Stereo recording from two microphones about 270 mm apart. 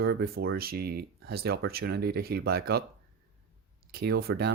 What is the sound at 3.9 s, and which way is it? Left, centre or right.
Speech, right.